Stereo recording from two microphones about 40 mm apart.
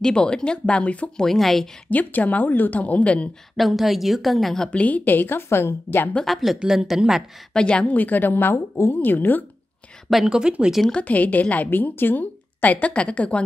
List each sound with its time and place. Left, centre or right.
0.0 s speech: left
1.1 s speech: centre
1.9 s speech: left
3.5 s a woman's voice: centre
4.6 s a woman's voice: left
6.2 s a woman's voice: centre
6.7 s a woman's voice: centre
7.5 s speech: left
7.8 s speech: left
10.2 s speech: right
10.9 s a woman's voice: left
12.8 s speech: left